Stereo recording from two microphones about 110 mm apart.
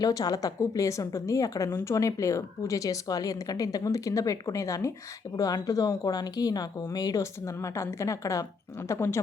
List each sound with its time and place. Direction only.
0.0 s speech: 35° left (ahead or behind)